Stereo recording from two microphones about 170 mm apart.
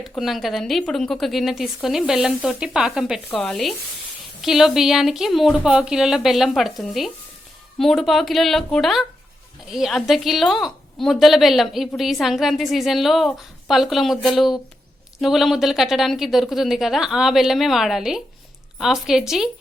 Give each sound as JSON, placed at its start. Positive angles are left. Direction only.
{"t": 0.2, "sound": "a woman's voice", "side_deg": 0}